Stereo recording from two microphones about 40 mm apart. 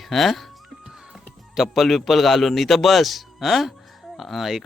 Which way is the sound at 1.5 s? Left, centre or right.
Centre.